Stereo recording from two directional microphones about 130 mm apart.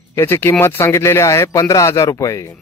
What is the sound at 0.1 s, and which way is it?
Speech, 20° left (ahead or behind).